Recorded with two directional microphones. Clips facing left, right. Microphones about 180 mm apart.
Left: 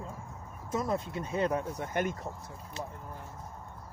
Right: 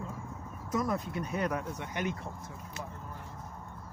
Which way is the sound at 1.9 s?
45° left (ahead or behind).